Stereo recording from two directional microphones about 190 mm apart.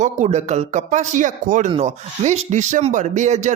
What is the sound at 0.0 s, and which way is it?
Speech, 40° right (ahead or behind).